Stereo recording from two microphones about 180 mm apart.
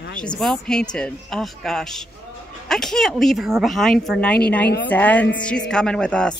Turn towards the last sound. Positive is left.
turn(degrees=5)  # may be behind; listen again after turning